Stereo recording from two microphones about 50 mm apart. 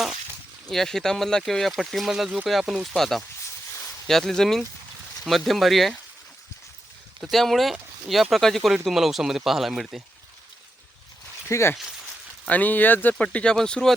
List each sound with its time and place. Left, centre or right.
0.7 s speech: centre
7.2 s speech: centre
8.6 s speech: centre
11.4 s speech: left
12.5 s speech: left
13.1 s speech: centre